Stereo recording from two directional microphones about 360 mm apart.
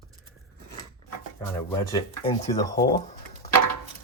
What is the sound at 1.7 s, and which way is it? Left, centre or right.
Speech, centre.